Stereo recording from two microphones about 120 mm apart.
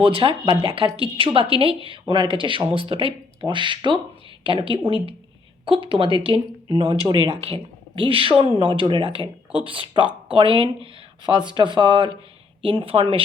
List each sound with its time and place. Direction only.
0.0 s speech: 45° right (ahead or behind)
12.6 s speech: 50° right (ahead or behind)